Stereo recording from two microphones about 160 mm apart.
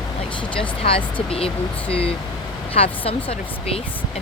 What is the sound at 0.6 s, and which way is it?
Speech, 35° left (ahead or behind).